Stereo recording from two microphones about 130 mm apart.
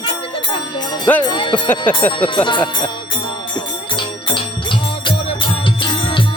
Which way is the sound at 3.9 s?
40° left (ahead or behind).